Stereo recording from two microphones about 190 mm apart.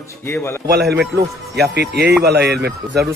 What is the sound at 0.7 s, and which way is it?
A man's voice, 60° right (ahead or behind).